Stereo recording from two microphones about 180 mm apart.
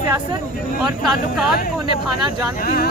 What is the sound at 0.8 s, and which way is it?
Speech, 5° right (ahead or behind).